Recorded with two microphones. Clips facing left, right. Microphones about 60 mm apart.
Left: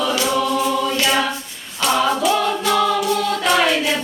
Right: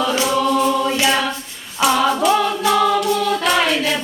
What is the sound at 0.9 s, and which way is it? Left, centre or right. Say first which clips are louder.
Choir: right 1 dB; centre.